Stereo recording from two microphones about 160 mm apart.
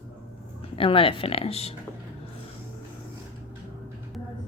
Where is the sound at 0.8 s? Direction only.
35° left (ahead or behind).